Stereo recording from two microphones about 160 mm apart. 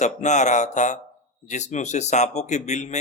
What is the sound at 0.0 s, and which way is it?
A man's voice, 45° left (ahead or behind).